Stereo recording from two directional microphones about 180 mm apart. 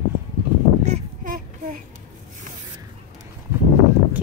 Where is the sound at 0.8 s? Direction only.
45° right (ahead or behind).